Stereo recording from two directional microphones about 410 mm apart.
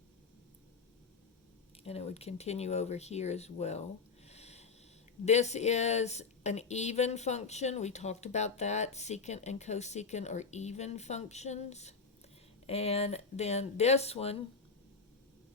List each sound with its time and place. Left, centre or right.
1.8 s speech: centre
4.3 s a sound: centre
5.2 s speech: centre